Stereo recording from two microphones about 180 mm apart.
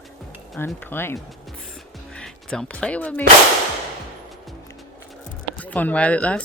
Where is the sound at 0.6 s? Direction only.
10° left (ahead or behind).